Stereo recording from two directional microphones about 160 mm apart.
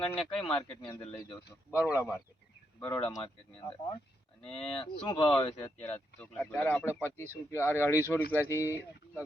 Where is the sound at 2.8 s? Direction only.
10° left (ahead or behind).